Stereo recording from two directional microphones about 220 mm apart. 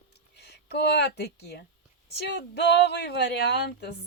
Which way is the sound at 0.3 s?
50° left (ahead or behind).